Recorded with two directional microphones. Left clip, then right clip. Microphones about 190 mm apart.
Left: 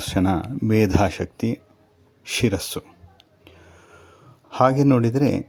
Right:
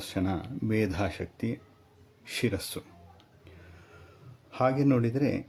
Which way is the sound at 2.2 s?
40° left (ahead or behind).